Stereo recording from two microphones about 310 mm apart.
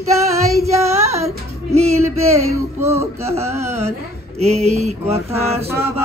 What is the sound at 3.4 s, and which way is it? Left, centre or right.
Chant, centre.